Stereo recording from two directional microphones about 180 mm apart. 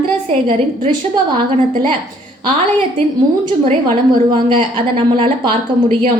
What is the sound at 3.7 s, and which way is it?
A woman's voice, 25° right (ahead or behind).